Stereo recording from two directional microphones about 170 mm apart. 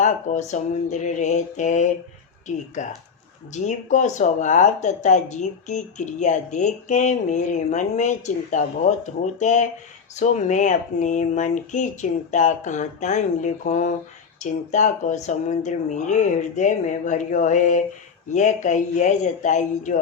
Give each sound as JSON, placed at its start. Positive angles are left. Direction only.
{"t": 0.0, "sound": "speech", "side_deg": 45}
{"t": 3.5, "sound": "speech", "side_deg": 45}